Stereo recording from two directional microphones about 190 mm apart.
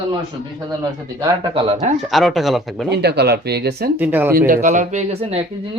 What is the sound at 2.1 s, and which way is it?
Speech, centre (ahead or behind).